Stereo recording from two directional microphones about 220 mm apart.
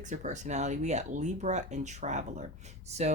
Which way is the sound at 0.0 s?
35° right (ahead or behind).